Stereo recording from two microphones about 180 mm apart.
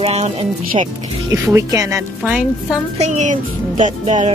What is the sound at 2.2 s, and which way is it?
Speech, 5° right (ahead or behind).